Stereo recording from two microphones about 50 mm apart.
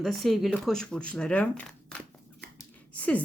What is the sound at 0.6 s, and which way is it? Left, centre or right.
Speech, centre.